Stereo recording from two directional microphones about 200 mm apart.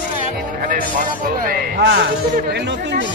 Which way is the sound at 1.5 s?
55° right (ahead or behind).